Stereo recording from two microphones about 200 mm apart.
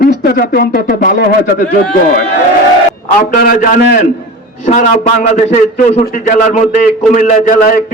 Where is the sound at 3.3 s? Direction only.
45° left (ahead or behind).